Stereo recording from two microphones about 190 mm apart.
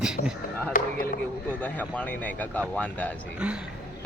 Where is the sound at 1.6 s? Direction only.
10° left (ahead or behind).